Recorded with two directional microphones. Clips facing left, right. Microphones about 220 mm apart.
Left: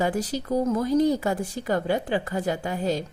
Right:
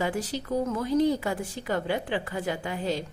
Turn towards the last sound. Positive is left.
turn(degrees=40)  # may be behind; listen again after turning